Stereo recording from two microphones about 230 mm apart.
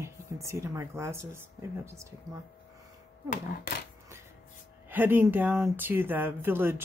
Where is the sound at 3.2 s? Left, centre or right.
Left.